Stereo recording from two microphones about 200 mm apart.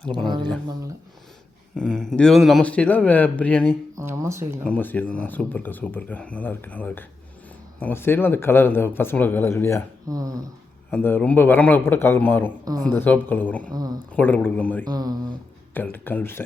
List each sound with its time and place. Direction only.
0.7 s speech: 15° right (ahead or behind)
1.7 s a man's voice: 5° left (ahead or behind)
3.9 s speech: 15° right (ahead or behind)
4.6 s speech: 10° left (ahead or behind)
10.1 s speech: 15° right (ahead or behind)
10.9 s speech: 10° left (ahead or behind)
12.7 s speech: 20° right (ahead or behind)
13.0 s speech: 10° left (ahead or behind)
13.7 s speech: 20° right (ahead or behind)
14.2 s speech: 10° left (ahead or behind)
14.8 s speech: 20° right (ahead or behind)
15.7 s speech: 10° left (ahead or behind)